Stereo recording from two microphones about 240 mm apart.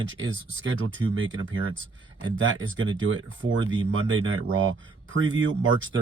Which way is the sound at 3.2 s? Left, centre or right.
Right.